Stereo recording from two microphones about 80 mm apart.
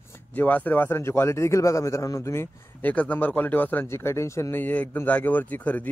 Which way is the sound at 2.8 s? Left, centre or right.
Centre.